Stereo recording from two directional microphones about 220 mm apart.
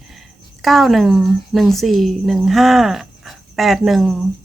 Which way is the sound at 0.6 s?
Centre (ahead or behind).